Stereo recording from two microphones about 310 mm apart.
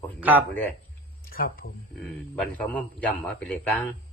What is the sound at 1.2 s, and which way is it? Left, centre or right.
Speech, left.